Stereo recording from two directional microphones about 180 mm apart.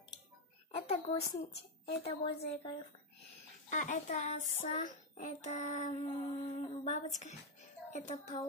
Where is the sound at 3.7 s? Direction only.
45° left (ahead or behind).